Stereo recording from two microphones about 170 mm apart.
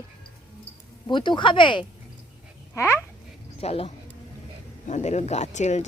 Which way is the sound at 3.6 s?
35° left (ahead or behind).